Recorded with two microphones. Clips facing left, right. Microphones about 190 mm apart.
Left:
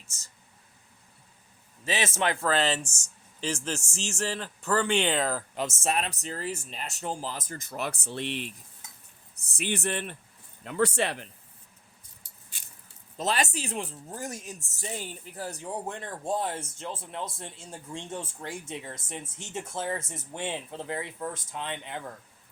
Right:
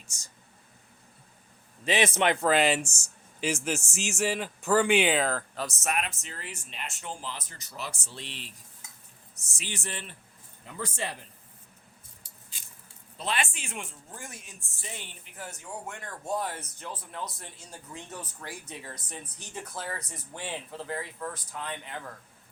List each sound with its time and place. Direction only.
0.1 s speech: 15° right (ahead or behind)
1.8 s speech: 15° right (ahead or behind); by 5.5 s centre (ahead or behind)
5.5 s a man's voice: 25° left (ahead or behind); by 10.2 s 60° left (ahead or behind)
10.6 s speech: 75° left (ahead or behind)
13.1 s speech: 40° left (ahead or behind); by 22.0 s 20° left (ahead or behind)